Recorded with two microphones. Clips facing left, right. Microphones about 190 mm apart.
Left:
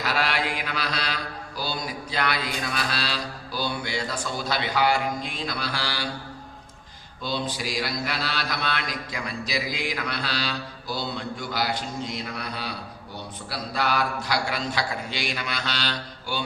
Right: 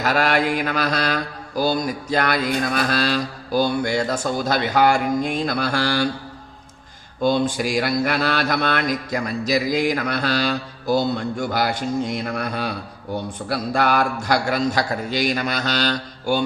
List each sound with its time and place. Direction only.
0.0 s mantra: 45° right (ahead or behind)
7.2 s mantra: 50° right (ahead or behind)